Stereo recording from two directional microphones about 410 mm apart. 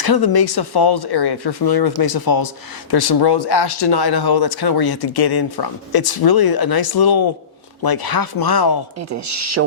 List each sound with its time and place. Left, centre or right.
0.0 s speech: left
9.0 s speech: right